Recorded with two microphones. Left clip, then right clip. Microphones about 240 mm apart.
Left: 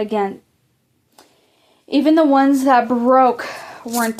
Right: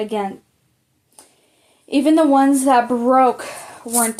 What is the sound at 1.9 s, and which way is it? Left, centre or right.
Speech, left.